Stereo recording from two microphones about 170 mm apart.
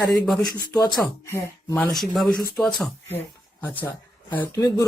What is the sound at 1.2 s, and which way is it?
A man's voice, 15° left (ahead or behind).